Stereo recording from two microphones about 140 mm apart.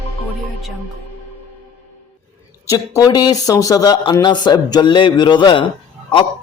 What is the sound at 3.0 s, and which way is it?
A man's voice, 30° left (ahead or behind).